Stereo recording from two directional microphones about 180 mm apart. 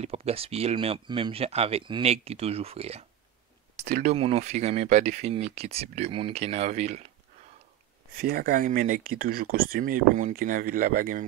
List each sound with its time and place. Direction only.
0.0 s speech: 35° right (ahead or behind)
3.7 s a sound: 65° right (ahead or behind)
4.0 s speech: 35° right (ahead or behind)
8.2 s speech: 55° right (ahead or behind)